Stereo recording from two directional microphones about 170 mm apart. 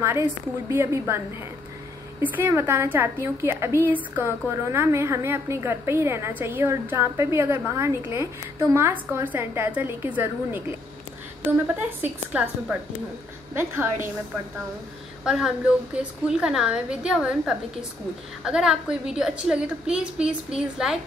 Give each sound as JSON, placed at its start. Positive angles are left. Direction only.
{"t": 0.0, "sound": "a woman's voice", "side_deg": -15}
{"t": 2.2, "sound": "a woman's voice", "side_deg": -10}
{"t": 11.6, "sound": "a woman's voice", "side_deg": -10}
{"t": 15.2, "sound": "a woman's voice", "side_deg": -5}